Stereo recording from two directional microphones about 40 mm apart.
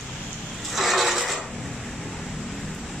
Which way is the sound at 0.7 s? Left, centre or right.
Centre.